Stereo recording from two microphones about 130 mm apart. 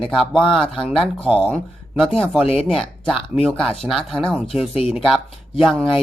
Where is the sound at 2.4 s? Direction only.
50° left (ahead or behind).